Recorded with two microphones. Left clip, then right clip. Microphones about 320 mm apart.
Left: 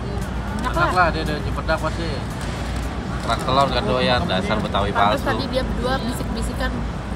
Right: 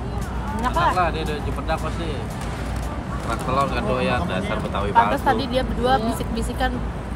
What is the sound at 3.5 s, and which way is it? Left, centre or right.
Speech, left.